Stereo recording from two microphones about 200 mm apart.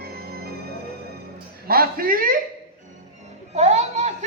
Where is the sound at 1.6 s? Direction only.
50° right (ahead or behind).